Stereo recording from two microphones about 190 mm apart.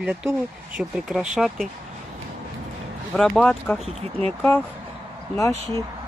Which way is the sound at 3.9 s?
35° right (ahead or behind).